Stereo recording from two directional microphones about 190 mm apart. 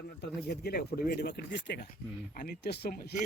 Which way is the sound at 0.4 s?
60° left (ahead or behind).